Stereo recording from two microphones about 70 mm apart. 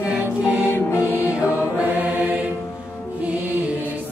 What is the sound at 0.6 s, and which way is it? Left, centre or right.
Music, left.